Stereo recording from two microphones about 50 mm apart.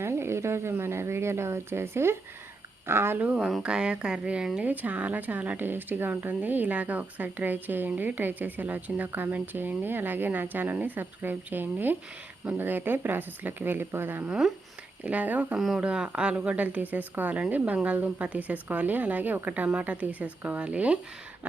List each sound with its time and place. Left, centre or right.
0.0 s a sound: right
0.8 s a woman's voice: right
3.6 s a woman's voice: centre
4.6 s speech: right
5.5 s a woman's voice: right
15.0 s speech: right
15.5 s speech: centre
15.8 s a woman's voice: right